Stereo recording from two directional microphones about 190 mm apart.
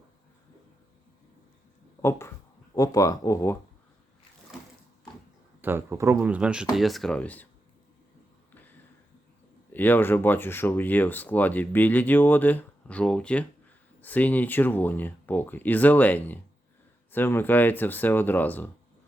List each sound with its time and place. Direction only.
2.0 s speech: 15° left (ahead or behind)
5.6 s speech: 15° right (ahead or behind); by 7.4 s 5° left (ahead or behind)
9.7 s speech: 10° left (ahead or behind)